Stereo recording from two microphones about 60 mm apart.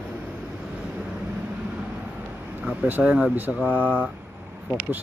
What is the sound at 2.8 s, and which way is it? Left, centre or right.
Speech, right.